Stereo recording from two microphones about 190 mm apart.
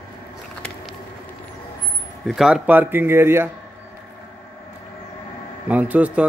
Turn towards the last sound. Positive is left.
turn(degrees=-5)  # may be behind; listen again after turning